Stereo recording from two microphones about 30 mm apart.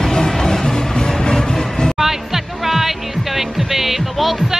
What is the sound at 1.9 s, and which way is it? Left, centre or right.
Music, centre.